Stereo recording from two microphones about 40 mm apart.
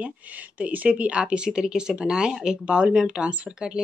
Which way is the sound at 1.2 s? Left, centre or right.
Right.